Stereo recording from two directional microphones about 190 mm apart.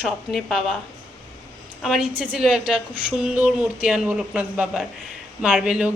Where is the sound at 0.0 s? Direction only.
Centre (ahead or behind).